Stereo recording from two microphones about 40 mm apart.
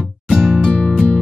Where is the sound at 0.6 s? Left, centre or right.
Left.